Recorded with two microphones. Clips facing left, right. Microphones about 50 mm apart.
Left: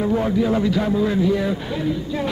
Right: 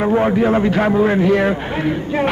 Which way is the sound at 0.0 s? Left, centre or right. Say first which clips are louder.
Right 5 dB; right.